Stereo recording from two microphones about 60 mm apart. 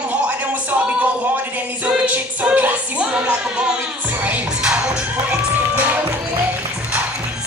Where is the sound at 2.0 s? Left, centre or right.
Right.